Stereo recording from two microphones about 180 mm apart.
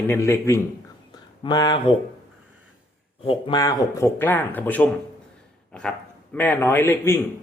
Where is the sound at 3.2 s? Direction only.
30° left (ahead or behind); by 4.9 s 10° left (ahead or behind).